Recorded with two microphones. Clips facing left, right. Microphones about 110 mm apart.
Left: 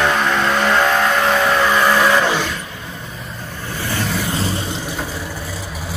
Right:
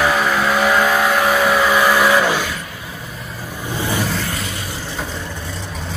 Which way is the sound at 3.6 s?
15° right (ahead or behind).